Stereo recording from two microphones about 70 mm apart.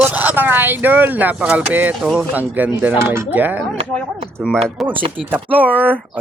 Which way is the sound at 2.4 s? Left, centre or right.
Right.